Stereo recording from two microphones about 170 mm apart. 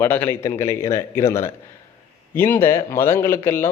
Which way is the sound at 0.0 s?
15° left (ahead or behind).